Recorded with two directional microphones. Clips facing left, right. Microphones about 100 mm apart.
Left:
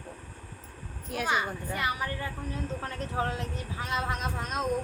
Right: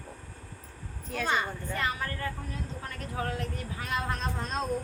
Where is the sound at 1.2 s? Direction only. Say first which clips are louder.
Left 1 dB; 10° left (ahead or behind).